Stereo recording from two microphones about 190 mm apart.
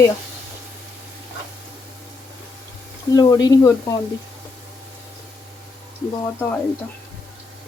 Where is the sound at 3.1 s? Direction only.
20° left (ahead or behind).